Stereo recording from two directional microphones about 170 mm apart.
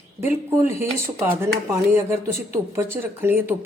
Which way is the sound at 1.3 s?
15° right (ahead or behind).